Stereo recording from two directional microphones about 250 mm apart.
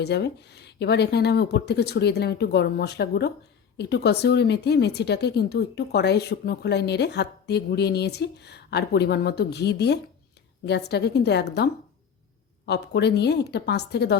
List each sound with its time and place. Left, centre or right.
0.0 s speech: left